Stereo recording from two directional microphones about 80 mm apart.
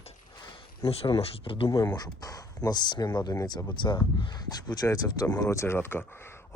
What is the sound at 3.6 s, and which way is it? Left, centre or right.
Speech, left.